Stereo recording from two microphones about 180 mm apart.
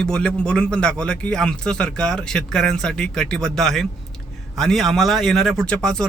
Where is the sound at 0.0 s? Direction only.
5° left (ahead or behind).